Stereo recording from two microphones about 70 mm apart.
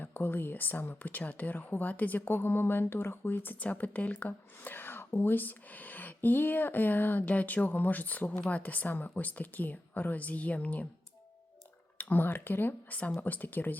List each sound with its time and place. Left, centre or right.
0.0 s speech: left
11.9 s speech: left